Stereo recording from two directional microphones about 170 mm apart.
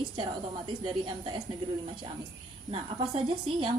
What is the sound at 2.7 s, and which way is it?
Speech, 30° right (ahead or behind).